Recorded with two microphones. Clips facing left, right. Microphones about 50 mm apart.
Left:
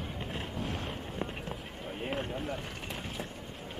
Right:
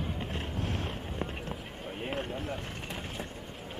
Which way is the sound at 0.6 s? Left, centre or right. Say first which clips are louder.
Right 1 dB; centre.